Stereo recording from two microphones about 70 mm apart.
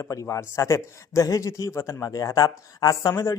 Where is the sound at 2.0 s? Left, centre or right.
Left.